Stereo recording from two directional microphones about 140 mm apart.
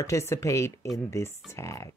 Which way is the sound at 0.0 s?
20° left (ahead or behind).